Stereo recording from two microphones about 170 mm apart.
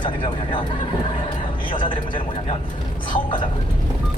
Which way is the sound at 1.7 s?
30° left (ahead or behind).